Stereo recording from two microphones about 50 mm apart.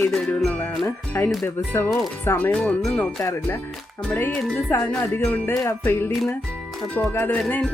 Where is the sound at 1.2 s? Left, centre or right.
Left.